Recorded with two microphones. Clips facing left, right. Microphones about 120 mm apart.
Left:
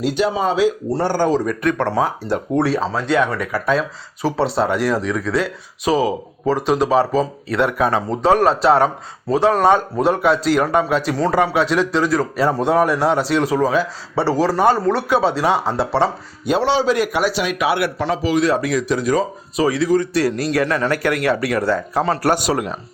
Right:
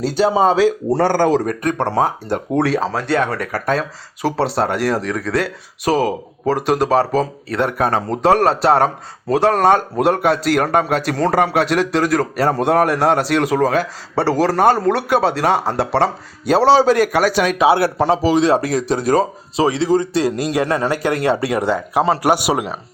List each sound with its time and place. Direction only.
0.0 s speech: 35° right (ahead or behind)
0.9 s speech: 90° right
1.5 s a man's voice: 45° right (ahead or behind)
2.0 s a man's voice: 55° right (ahead or behind)
2.6 s speech: 90° right
3.1 s a man's voice: 45° right (ahead or behind)
4.2 s speech: 75° right (ahead or behind)
4.6 s a man's voice: 60° right (ahead or behind)
7.5 s a man's voice: 45° right (ahead or behind)
8.2 s a man's voice: 65° right (ahead or behind)
12.5 s a man's voice: 60° right (ahead or behind)
16.5 s a man's voice: 40° right (ahead or behind)
17.6 s a man's voice: 30° right (ahead or behind); by 22.8 s 10° right (ahead or behind)